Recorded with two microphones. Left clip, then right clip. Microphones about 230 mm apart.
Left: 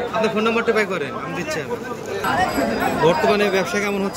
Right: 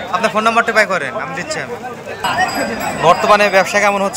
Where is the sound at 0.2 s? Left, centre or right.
Centre.